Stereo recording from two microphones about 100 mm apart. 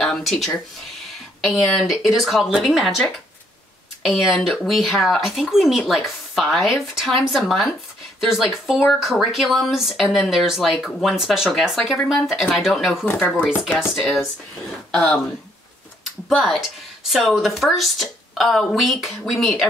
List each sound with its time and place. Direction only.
0.0 s speech: centre (ahead or behind)
4.0 s speech: centre (ahead or behind)
13.0 s speech: 15° left (ahead or behind)
16.3 s speech: centre (ahead or behind)